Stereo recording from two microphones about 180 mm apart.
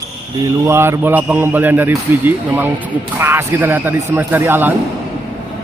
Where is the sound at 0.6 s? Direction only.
15° right (ahead or behind).